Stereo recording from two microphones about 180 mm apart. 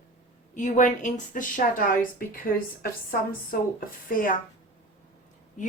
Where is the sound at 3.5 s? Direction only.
55° left (ahead or behind).